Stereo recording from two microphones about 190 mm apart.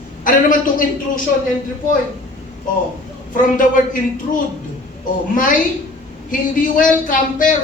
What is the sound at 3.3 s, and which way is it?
Speech, 45° left (ahead or behind).